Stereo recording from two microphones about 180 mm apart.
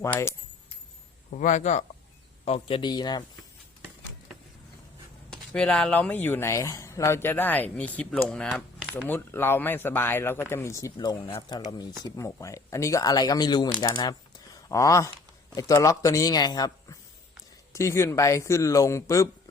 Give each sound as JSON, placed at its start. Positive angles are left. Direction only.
{"t": 0.0, "sound": "speech", "side_deg": 15}
{"t": 1.3, "sound": "speech", "side_deg": 45}
{"t": 2.4, "sound": "speech", "side_deg": 30}
{"t": 5.3, "sound": "speech", "side_deg": 5}
{"t": 9.0, "sound": "speech", "side_deg": 10}